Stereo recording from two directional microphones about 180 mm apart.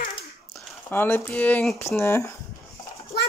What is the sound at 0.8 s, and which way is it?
Speech, 10° left (ahead or behind).